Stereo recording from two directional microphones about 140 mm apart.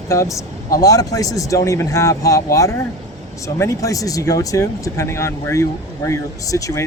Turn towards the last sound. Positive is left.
turn(degrees=25)  # may be behind; listen again after turning